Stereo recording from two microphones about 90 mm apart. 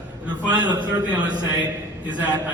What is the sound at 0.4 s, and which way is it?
Speech, 55° right (ahead or behind).